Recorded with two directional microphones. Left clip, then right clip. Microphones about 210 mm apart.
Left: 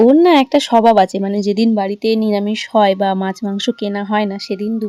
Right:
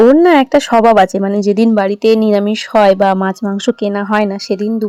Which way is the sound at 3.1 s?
15° left (ahead or behind).